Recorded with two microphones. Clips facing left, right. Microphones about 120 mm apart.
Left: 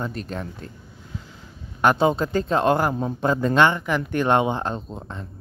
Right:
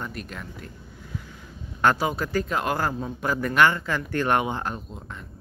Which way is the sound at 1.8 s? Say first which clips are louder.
Left 4 dB; 20° left (ahead or behind).